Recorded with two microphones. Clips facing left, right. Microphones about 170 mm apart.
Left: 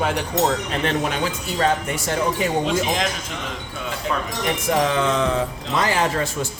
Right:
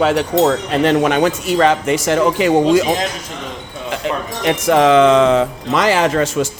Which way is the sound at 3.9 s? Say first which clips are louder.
Right 5 dB; 85° right.